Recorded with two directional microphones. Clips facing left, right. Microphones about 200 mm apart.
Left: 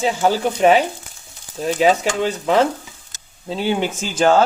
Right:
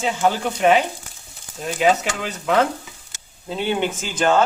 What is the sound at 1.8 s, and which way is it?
Speech, 35° left (ahead or behind).